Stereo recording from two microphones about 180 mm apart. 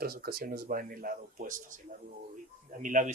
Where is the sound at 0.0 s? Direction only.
55° right (ahead or behind).